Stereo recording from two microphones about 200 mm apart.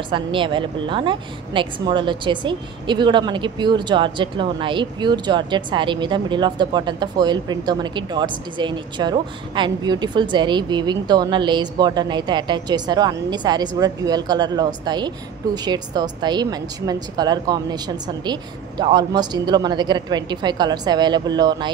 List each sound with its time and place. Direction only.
0.1 s a woman's voice: 25° right (ahead or behind)